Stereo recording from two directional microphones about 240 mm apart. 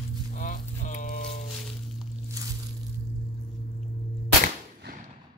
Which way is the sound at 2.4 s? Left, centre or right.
Centre.